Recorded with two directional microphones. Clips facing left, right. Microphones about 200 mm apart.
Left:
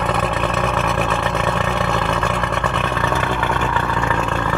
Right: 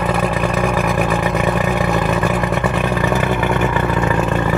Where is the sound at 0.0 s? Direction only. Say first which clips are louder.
Right 3 dB; 5° right (ahead or behind).